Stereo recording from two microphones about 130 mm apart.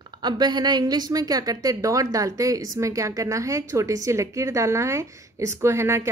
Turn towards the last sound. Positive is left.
turn(degrees=-20)  # may be behind; listen again after turning